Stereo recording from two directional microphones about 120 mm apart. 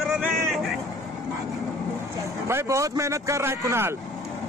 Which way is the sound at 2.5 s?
25° right (ahead or behind).